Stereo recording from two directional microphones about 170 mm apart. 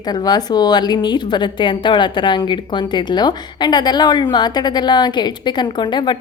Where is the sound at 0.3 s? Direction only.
25° left (ahead or behind).